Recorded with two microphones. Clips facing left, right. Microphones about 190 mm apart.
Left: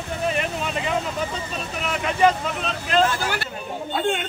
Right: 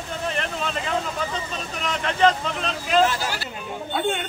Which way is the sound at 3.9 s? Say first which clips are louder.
Left 1 dB; centre (ahead or behind).